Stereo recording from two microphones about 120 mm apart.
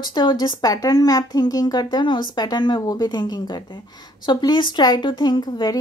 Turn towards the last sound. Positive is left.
turn(degrees=35)  # may be behind; listen again after turning